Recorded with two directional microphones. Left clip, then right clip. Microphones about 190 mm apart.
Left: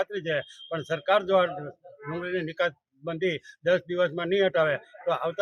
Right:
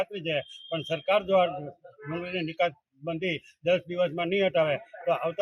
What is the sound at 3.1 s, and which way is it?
A man's voice, 25° left (ahead or behind).